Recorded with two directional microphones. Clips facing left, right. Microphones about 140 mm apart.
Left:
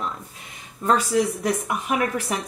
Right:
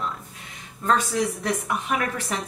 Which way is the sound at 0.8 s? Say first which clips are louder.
Left 3 dB; 10° left (ahead or behind).